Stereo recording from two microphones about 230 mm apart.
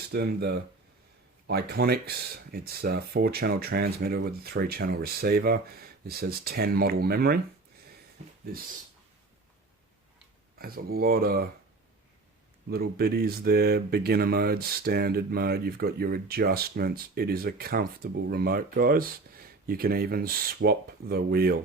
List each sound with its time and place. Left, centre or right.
0.1 s speech: right
10.6 s speech: right
12.6 s speech: right